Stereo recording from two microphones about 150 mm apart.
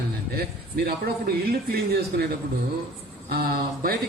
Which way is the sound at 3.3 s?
90° right.